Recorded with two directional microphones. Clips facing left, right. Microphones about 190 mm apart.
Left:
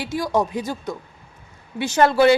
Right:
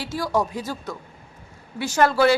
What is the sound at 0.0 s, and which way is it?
A woman's voice, 15° left (ahead or behind).